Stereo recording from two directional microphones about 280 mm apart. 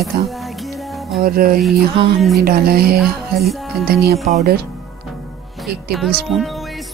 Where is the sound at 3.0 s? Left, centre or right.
Centre.